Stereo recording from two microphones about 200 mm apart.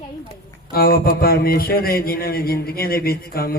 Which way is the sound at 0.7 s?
50° left (ahead or behind).